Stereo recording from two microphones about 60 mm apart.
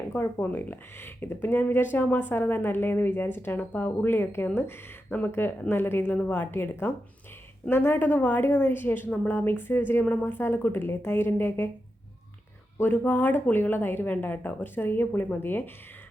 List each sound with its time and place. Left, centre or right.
0.1 s speech: left
5.0 s speech: left
5.3 s speech: left
12.8 s speech: left